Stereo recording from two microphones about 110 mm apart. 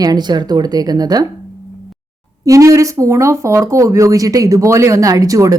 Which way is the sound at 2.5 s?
30° right (ahead or behind).